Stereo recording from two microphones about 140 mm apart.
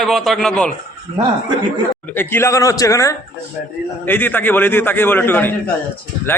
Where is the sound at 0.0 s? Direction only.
Centre (ahead or behind).